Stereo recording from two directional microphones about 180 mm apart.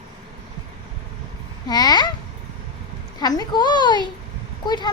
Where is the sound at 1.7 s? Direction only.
20° left (ahead or behind).